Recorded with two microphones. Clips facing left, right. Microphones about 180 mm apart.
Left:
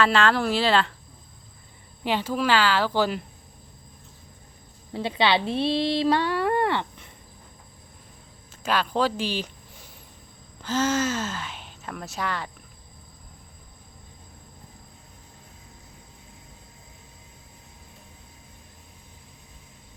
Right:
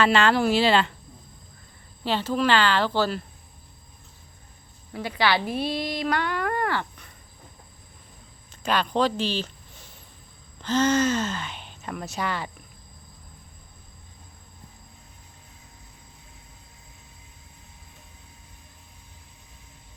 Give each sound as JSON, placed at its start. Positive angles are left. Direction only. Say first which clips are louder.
{"t": 0.0, "sound": "speech", "louder": "right 1 dB", "side_deg": 0}
{"t": 2.0, "sound": "speech", "louder": "right 1 dB", "side_deg": 10}
{"t": 4.9, "sound": "speech", "louder": "left 1 dB", "side_deg": 25}
{"t": 8.6, "sound": "speech", "louder": "right 1 dB", "side_deg": 5}